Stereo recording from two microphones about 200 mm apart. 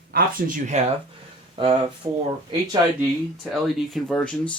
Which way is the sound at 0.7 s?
35° right (ahead or behind).